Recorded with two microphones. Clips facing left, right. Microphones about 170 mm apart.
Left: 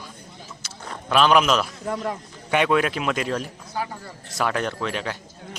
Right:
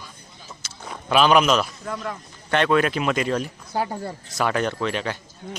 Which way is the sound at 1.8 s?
25° left (ahead or behind).